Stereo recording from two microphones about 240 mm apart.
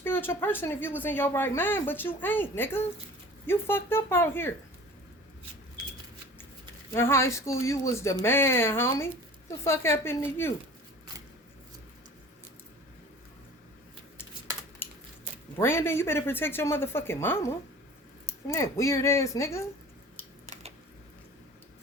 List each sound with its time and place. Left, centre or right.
0.0 s speech: centre
6.9 s speech: centre
15.5 s speech: centre
20.5 s typing: right